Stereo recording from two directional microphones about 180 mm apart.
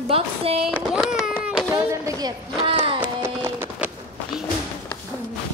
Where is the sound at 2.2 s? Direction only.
30° right (ahead or behind).